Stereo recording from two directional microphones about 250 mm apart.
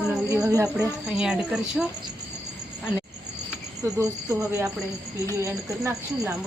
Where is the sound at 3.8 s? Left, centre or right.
Centre.